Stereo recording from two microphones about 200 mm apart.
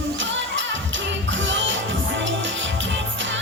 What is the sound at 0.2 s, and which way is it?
Music, 65° right (ahead or behind).